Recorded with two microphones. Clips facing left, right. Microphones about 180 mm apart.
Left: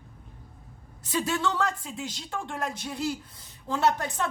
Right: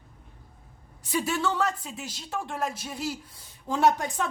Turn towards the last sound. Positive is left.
turn(degrees=-15)  # may be behind; listen again after turning